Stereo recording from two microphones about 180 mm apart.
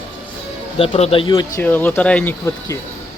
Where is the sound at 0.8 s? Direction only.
35° left (ahead or behind).